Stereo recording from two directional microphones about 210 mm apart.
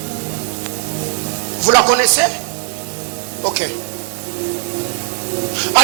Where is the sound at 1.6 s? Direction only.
25° right (ahead or behind).